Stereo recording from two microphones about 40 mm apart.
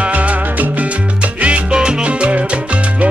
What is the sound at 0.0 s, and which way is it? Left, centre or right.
Music, right.